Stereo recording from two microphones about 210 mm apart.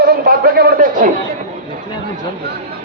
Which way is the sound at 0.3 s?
45° right (ahead or behind).